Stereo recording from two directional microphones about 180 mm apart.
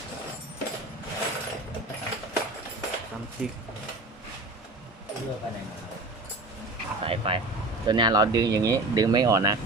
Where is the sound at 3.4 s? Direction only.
5° right (ahead or behind).